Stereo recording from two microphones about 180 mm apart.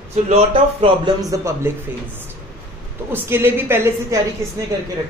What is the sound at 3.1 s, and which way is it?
A woman's voice, 15° right (ahead or behind).